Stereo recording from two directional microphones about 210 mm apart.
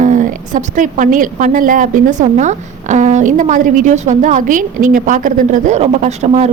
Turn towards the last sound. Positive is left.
turn(degrees=-30)  # may be behind; listen again after turning